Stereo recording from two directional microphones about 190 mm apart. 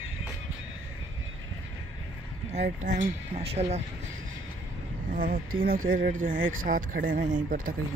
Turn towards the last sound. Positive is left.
turn(degrees=-45)  # may be behind; listen again after turning